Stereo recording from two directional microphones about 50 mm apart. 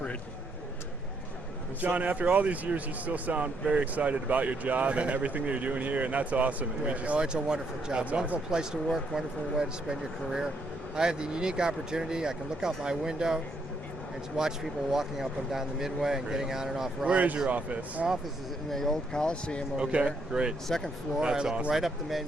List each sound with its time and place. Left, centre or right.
1.8 s speech: right; by 13.4 s centre
14.9 s speech: centre
17.1 s speech: right
18.7 s speech: centre
19.7 s speech: right
20.7 s speech: centre
21.2 s speech: centre
21.7 s speech: centre